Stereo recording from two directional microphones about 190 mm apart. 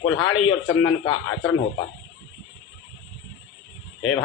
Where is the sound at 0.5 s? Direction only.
80° left.